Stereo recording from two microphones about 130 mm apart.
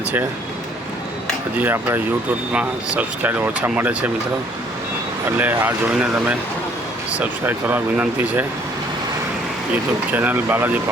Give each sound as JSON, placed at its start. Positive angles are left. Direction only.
{"t": 1.5, "sound": "speech", "side_deg": -15}
{"t": 5.4, "sound": "speech", "side_deg": -15}
{"t": 10.1, "sound": "speech", "side_deg": -15}